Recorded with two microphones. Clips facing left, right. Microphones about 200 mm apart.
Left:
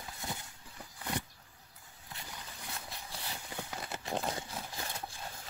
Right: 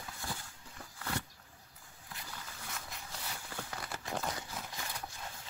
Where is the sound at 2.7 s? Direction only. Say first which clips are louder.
Left 2 dB; 35° left (ahead or behind).